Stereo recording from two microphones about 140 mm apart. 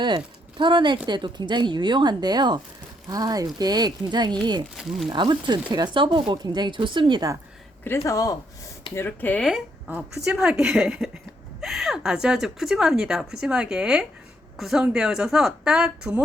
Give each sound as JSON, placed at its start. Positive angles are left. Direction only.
{"t": 0.6, "sound": "speech", "side_deg": -35}
{"t": 4.8, "sound": "speech", "side_deg": 0}
{"t": 5.0, "sound": "speech", "side_deg": -35}
{"t": 7.9, "sound": "speech", "side_deg": 20}
{"t": 9.0, "sound": "speech", "side_deg": 15}
{"t": 9.5, "sound": "speech", "side_deg": -5}